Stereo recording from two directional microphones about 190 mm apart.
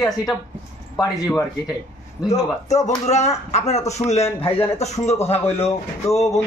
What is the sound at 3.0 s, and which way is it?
Speech, 35° left (ahead or behind).